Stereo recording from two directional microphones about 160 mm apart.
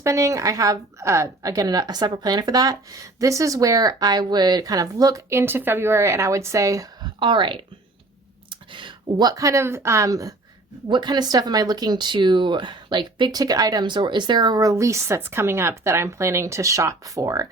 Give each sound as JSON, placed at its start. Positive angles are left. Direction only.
{"t": 0.0, "sound": "a woman's voice", "side_deg": -20}